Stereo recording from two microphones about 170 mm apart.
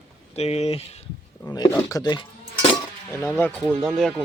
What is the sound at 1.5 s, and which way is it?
Speech, 25° left (ahead or behind).